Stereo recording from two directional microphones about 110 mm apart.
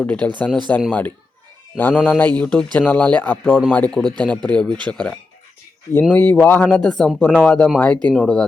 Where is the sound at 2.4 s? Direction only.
15° left (ahead or behind).